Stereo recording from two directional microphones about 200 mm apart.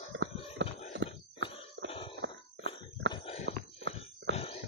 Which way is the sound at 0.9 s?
65° right (ahead or behind).